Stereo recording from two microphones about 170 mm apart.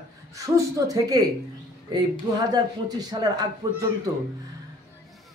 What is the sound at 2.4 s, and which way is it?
A woman's voice, 25° right (ahead or behind).